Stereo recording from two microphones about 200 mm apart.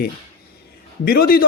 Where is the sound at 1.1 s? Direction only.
50° left (ahead or behind).